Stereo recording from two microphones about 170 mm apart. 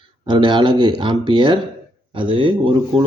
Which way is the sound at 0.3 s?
25° right (ahead or behind).